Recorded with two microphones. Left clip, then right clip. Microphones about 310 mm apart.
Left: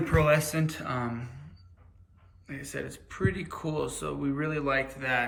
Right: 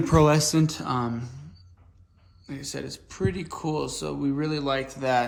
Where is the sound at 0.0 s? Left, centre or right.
Centre.